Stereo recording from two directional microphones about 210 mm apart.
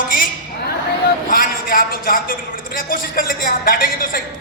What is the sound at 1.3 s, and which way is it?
Speech, 40° left (ahead or behind).